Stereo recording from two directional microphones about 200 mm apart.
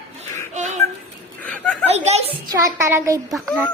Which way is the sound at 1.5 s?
5° left (ahead or behind).